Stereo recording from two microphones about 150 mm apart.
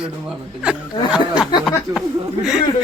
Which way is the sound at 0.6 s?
5° right (ahead or behind).